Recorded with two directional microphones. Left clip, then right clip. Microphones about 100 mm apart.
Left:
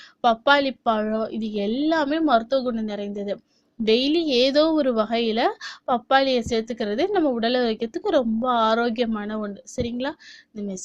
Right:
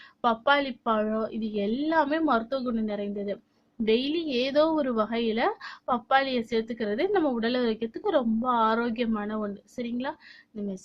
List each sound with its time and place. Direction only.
0.2 s a woman's voice: 50° left (ahead or behind)